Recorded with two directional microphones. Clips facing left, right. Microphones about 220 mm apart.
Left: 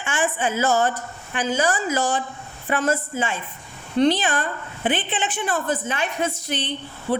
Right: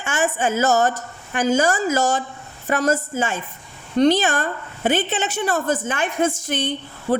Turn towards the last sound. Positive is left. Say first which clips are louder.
# right 3 dB
turn(degrees=-45)  # may be behind; listen again after turning